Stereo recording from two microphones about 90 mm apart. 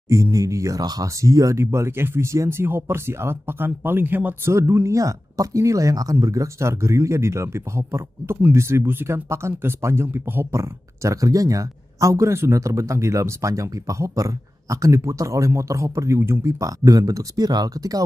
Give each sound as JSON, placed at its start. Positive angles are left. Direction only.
{"t": 0.1, "sound": "speech", "side_deg": -35}
{"t": 4.6, "sound": "speech", "side_deg": -30}